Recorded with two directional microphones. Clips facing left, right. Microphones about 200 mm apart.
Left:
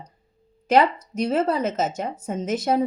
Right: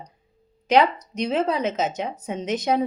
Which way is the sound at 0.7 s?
5° left (ahead or behind).